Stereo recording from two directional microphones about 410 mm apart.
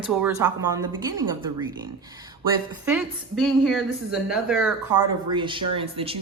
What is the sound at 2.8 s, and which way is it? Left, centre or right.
A woman's voice, centre.